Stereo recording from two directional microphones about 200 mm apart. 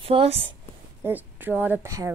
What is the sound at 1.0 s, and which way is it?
A woman's voice, 10° right (ahead or behind).